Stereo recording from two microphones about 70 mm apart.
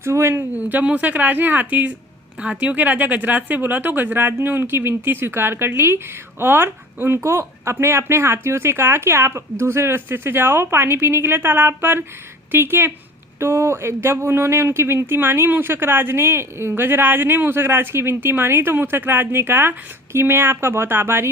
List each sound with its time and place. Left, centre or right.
0.0 s speech: right
0.5 s speech: right